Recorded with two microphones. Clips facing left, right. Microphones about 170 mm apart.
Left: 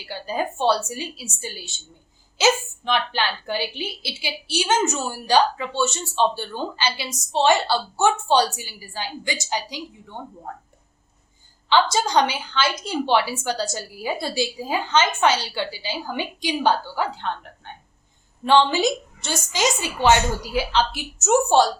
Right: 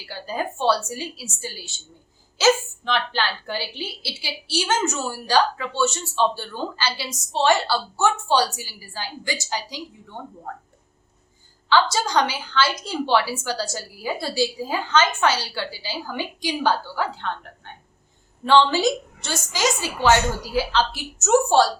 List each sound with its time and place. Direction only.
0.0 s a woman's voice: 20° left (ahead or behind)
11.7 s a woman's voice: 20° left (ahead or behind)
18.4 s a woman's voice: 15° left (ahead or behind)